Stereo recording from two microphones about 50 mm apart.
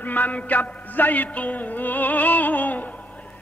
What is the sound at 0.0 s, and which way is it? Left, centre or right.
A man's voice, left.